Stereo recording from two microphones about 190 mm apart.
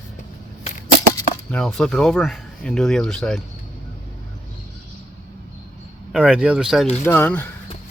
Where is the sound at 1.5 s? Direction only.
5° left (ahead or behind).